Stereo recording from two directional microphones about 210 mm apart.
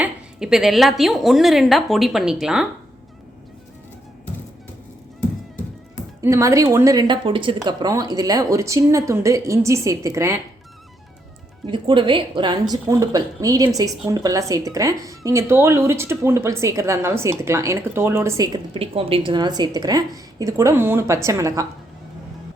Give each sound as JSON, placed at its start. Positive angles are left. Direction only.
{"t": 0.0, "sound": "a woman's voice", "side_deg": -5}
{"t": 6.2, "sound": "speech", "side_deg": -15}
{"t": 11.6, "sound": "a woman's voice", "side_deg": -25}